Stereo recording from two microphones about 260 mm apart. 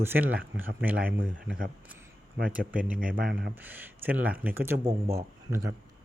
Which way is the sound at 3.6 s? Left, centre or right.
Centre.